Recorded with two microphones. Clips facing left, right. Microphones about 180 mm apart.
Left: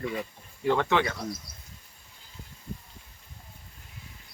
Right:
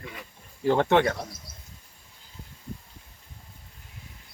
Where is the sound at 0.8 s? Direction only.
50° right (ahead or behind).